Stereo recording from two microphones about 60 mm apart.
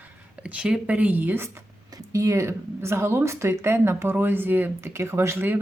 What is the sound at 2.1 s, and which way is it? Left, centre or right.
Speech, right.